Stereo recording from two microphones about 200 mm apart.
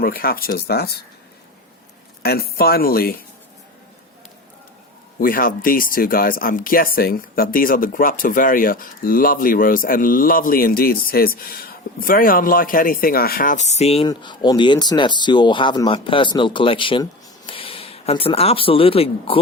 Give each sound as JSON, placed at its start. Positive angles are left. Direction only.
{"t": 0.0, "sound": "speech", "side_deg": 45}
{"t": 2.2, "sound": "speech", "side_deg": 50}
{"t": 5.2, "sound": "speech", "side_deg": 45}